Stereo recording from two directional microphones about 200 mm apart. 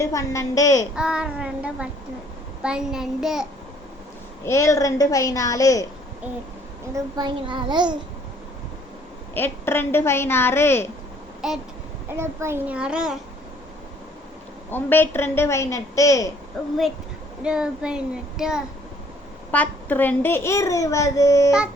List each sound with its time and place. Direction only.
0.0 s a child's voice: 15° left (ahead or behind)
0.9 s a child's voice: 5° right (ahead or behind)
4.4 s a child's voice: 15° left (ahead or behind)
6.9 s a child's voice: 20° right (ahead or behind)
9.3 s a child's voice: 10° left (ahead or behind)
11.4 s a child's voice: centre (ahead or behind)
12.0 s a child's voice: 15° right (ahead or behind)
14.7 s a child's voice: 10° left (ahead or behind)
16.6 s a child's voice: 5° left (ahead or behind)
19.5 s a child's voice: 10° left (ahead or behind)